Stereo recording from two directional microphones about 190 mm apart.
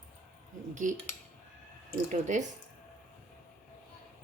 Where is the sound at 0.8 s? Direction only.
40° right (ahead or behind).